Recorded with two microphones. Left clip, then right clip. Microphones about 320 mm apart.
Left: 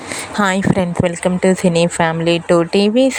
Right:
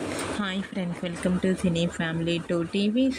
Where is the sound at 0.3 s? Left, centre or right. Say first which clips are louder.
Left 16 dB; left.